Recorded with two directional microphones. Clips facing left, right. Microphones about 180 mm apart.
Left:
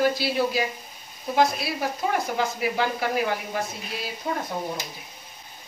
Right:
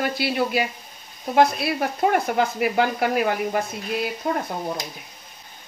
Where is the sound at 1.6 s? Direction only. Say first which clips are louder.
Right 5 dB; 60° right (ahead or behind).